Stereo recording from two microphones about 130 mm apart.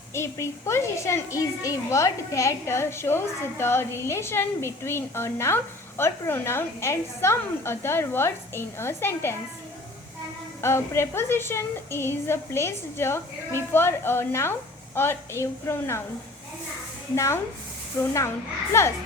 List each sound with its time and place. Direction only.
0.1 s a woman's voice: 20° left (ahead or behind)
10.6 s a woman's voice: 20° left (ahead or behind)
17.2 s a woman's voice: 20° left (ahead or behind)